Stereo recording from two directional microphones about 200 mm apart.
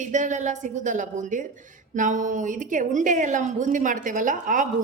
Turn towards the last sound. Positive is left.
turn(degrees=-40)  # may be behind; listen again after turning